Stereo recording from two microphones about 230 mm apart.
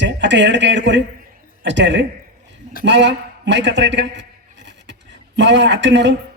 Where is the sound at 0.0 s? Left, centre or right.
Right.